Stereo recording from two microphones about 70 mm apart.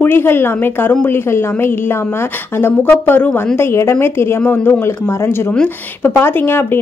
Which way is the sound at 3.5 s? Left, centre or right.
Left.